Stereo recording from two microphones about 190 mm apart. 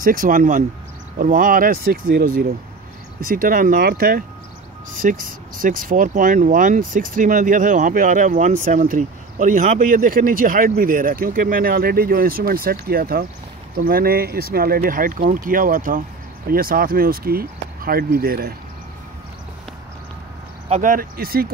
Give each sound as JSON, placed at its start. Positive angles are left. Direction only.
{"t": 0.0, "sound": "speech", "side_deg": -45}
{"t": 20.6, "sound": "speech", "side_deg": -35}
{"t": 20.9, "sound": "speech", "side_deg": -50}